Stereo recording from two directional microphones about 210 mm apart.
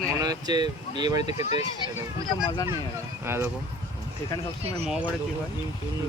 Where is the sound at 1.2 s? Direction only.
30° left (ahead or behind).